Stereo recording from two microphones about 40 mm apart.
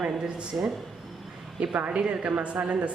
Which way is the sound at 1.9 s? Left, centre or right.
Right.